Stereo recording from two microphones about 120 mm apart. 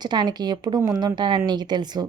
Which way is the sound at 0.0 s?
35° right (ahead or behind).